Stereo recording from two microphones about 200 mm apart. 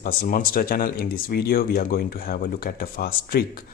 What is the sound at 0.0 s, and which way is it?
Speech, 45° left (ahead or behind).